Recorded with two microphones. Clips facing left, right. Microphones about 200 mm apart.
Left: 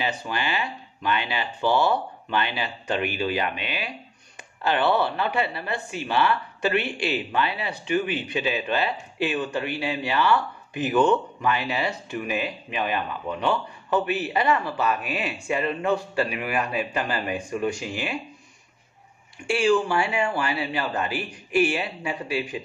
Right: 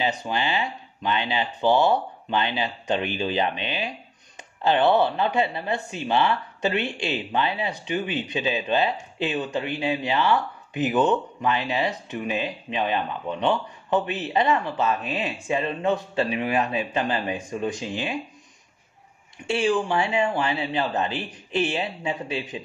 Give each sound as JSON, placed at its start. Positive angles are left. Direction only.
{"t": 0.2, "sound": "speech", "side_deg": -20}
{"t": 19.5, "sound": "speech", "side_deg": -20}